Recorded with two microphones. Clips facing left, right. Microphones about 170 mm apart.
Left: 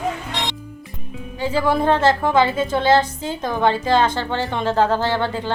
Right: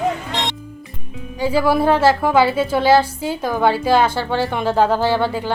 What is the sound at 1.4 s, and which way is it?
A woman's voice, 10° right (ahead or behind).